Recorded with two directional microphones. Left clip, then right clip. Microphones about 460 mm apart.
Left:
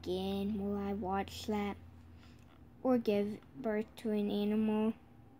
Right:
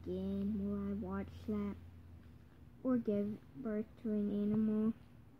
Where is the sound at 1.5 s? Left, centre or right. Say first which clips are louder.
Left 2 dB; centre.